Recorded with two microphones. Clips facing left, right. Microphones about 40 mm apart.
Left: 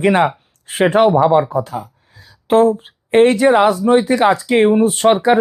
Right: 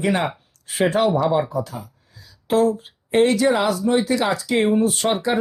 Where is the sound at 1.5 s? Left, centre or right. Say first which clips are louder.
Left 6 dB; left.